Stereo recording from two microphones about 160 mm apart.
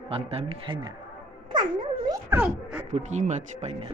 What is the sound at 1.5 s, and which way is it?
Dog, 30° right (ahead or behind).